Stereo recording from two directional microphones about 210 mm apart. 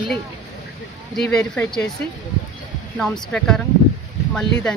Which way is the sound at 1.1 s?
5° left (ahead or behind).